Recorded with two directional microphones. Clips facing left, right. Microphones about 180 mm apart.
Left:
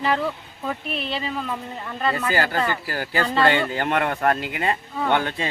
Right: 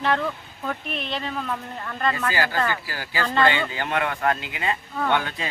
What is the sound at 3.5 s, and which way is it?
Speech, 45° left (ahead or behind).